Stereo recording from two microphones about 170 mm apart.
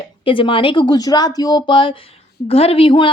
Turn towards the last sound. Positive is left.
turn(degrees=30)  # may be behind; listen again after turning